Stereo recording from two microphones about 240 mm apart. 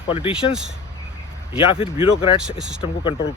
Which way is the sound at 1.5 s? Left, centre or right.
Left.